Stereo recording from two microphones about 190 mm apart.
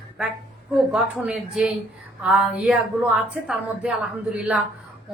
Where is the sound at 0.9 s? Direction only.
5° right (ahead or behind).